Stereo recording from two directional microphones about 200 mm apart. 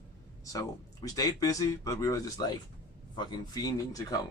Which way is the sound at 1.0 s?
20° left (ahead or behind).